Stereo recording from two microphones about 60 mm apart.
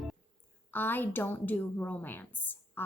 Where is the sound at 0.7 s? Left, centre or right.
Left.